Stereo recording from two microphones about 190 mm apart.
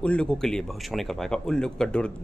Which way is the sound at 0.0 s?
5° left (ahead or behind).